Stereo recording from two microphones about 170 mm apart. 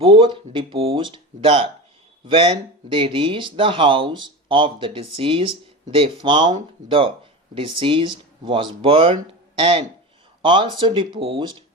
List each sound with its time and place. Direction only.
0.0 s speech: 30° right (ahead or behind)